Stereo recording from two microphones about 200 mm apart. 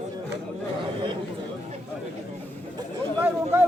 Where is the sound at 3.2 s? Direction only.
10° right (ahead or behind).